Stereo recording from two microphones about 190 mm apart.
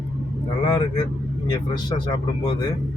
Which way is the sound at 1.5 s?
25° left (ahead or behind).